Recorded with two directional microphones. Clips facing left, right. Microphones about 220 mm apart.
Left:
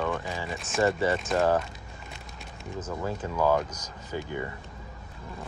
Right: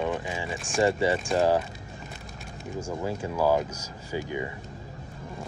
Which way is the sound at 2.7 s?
10° right (ahead or behind).